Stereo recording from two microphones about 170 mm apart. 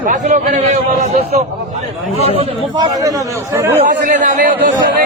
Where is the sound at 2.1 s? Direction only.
35° right (ahead or behind).